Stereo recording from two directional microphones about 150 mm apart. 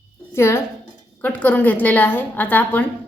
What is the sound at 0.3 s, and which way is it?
A woman's voice, 15° left (ahead or behind).